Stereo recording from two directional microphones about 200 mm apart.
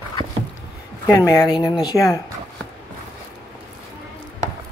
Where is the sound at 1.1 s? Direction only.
15° left (ahead or behind).